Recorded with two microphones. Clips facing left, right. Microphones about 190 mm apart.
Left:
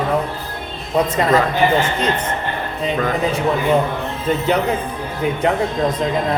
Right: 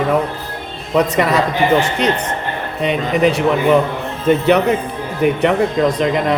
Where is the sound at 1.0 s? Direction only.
75° right (ahead or behind).